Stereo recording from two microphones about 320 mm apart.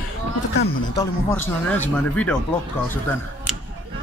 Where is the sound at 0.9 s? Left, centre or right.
Centre.